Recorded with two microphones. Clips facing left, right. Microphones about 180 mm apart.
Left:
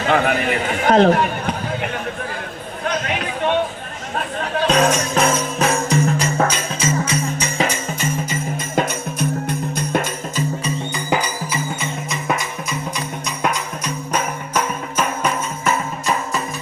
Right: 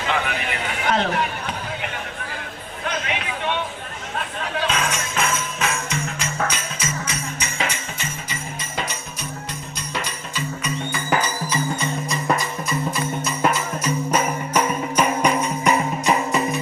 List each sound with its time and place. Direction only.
0.1 s speech: 55° left (ahead or behind)
2.8 s music: 45° left (ahead or behind)
10.9 s music: 15° left (ahead or behind); by 16.1 s 15° right (ahead or behind)